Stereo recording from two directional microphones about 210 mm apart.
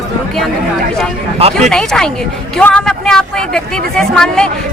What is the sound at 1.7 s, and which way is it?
Speech, centre (ahead or behind).